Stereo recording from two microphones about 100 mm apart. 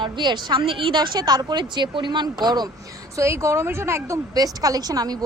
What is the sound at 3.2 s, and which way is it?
A woman's voice, 30° right (ahead or behind).